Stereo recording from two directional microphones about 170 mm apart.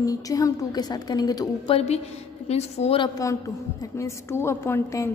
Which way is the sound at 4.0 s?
15° left (ahead or behind).